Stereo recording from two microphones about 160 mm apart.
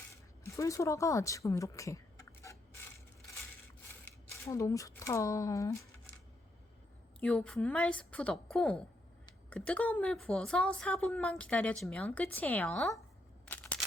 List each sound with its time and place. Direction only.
0.1 s a sound: 20° left (ahead or behind)
4.0 s speech: 15° left (ahead or behind)
7.2 s a woman's voice: 5° left (ahead or behind)
13.4 s single-lens reflex camera: 10° left (ahead or behind)